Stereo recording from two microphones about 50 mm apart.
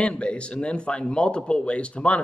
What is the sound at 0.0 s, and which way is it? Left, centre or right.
Speech, left.